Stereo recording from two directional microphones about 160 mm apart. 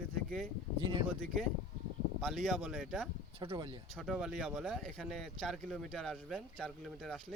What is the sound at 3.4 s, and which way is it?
Speech, 30° right (ahead or behind).